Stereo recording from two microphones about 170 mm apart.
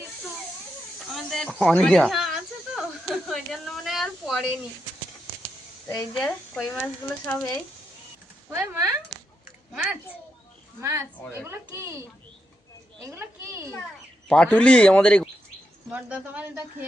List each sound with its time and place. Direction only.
1.1 s a sound: centre (ahead or behind)
6.2 s speech: centre (ahead or behind)
8.4 s speech: 10° right (ahead or behind)
10.8 s speech: 15° right (ahead or behind)
11.2 s speech: 15° left (ahead or behind)
11.4 s speech: 15° right (ahead or behind)
13.1 s speech: 15° right (ahead or behind)
14.3 s speech: 5° left (ahead or behind)
15.9 s speech: 5° right (ahead or behind)